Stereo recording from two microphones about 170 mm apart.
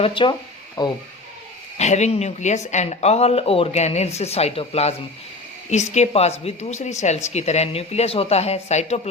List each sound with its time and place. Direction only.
0.0 s speech: 30° left (ahead or behind)
1.8 s a woman's voice: 40° left (ahead or behind)